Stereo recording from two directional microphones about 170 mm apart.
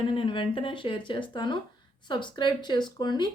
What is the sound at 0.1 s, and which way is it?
Speech, 30° left (ahead or behind).